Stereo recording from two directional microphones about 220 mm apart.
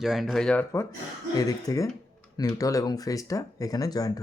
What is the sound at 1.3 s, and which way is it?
Speech, 15° left (ahead or behind).